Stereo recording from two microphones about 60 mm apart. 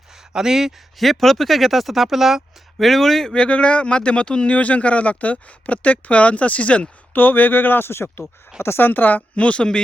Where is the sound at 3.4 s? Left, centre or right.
Centre.